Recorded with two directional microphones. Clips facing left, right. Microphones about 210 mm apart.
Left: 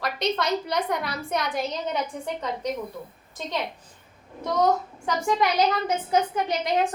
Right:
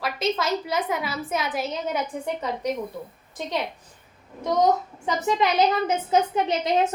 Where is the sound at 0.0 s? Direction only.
5° right (ahead or behind).